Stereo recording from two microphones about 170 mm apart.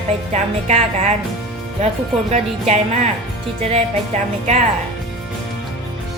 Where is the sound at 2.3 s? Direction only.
40° right (ahead or behind).